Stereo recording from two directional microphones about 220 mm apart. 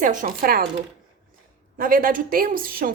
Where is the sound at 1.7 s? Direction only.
40° right (ahead or behind).